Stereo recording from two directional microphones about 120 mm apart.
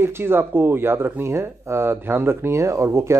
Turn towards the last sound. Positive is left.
turn(degrees=-25)  # may be behind; listen again after turning